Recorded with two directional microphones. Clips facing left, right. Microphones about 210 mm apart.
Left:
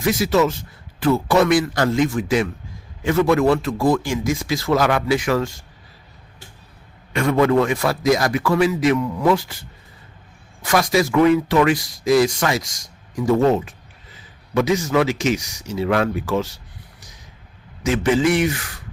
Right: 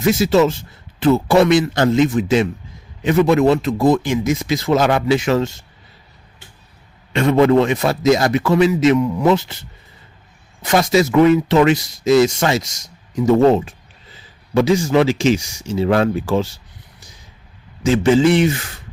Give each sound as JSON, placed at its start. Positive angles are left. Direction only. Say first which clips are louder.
{"t": 0.0, "sound": "speech", "louder": "right 4 dB", "side_deg": -25}
{"t": 7.1, "sound": "speech", "louder": "right 4 dB", "side_deg": -25}
{"t": 17.8, "sound": "speech", "louder": "right 4 dB", "side_deg": -30}